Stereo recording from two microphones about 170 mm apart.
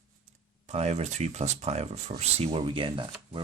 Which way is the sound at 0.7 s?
40° right (ahead or behind).